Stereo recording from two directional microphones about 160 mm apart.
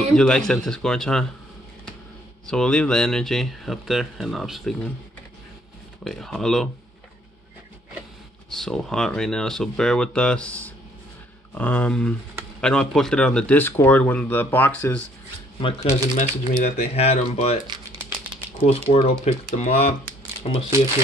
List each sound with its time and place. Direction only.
0.1 s speech: 5° left (ahead or behind)
2.4 s speech: 5° left (ahead or behind)
6.0 s speech: centre (ahead or behind)
8.5 s speech: centre (ahead or behind)
16.2 s speech: 50° left (ahead or behind)
18.6 s speech: 40° left (ahead or behind)